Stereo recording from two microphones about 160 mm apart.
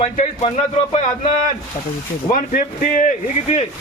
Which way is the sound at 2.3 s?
60° left (ahead or behind).